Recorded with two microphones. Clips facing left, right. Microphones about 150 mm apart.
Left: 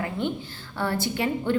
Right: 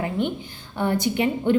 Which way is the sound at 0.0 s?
20° right (ahead or behind).